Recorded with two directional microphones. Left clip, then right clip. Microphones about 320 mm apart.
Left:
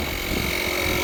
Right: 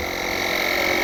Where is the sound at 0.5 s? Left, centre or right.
Centre.